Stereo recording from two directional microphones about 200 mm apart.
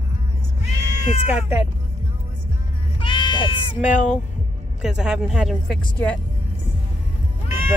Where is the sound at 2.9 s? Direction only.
25° left (ahead or behind).